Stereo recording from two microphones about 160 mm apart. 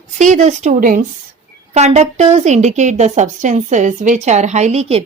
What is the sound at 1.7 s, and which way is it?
A woman's voice, 45° right (ahead or behind).